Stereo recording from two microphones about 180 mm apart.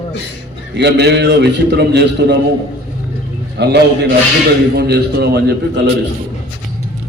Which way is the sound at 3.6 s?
70° right (ahead or behind).